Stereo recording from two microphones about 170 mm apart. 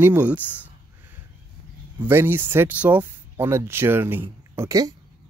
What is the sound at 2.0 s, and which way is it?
Speech, 15° right (ahead or behind).